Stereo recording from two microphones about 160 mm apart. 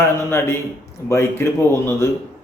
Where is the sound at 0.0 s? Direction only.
15° left (ahead or behind).